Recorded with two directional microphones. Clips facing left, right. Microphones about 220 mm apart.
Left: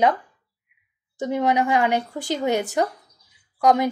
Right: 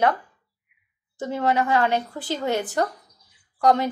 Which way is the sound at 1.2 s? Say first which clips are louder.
Left 2 dB; 15° left (ahead or behind).